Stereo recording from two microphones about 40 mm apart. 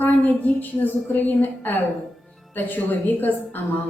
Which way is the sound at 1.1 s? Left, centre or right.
Left.